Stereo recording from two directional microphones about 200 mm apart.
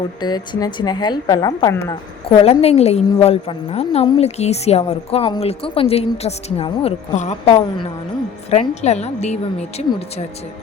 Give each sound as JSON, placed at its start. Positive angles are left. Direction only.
{"t": 0.2, "sound": "a woman's voice", "side_deg": 20}
{"t": 2.3, "sound": "a woman's voice", "side_deg": 30}